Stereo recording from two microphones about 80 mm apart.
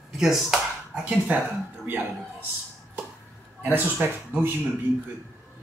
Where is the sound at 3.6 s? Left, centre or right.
Right.